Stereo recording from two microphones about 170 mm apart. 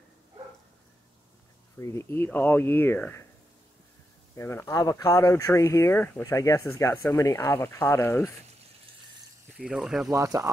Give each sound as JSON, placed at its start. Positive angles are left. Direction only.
{"t": 1.8, "sound": "speech", "side_deg": 15}
{"t": 4.4, "sound": "speech", "side_deg": 15}
{"t": 9.6, "sound": "speech", "side_deg": -5}
{"t": 10.1, "sound": "speech", "side_deg": -20}